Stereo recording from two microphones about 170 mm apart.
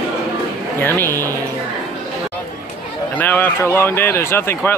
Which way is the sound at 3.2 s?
10° left (ahead or behind).